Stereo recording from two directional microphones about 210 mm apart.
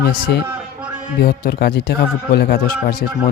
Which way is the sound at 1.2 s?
45° left (ahead or behind).